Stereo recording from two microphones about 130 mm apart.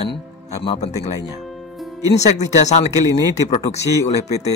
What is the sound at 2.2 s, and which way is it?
A man's voice, 60° left (ahead or behind).